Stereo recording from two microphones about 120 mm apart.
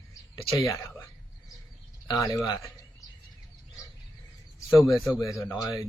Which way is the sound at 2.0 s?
25° left (ahead or behind).